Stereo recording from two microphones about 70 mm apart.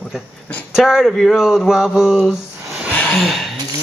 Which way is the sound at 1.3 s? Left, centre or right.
Centre.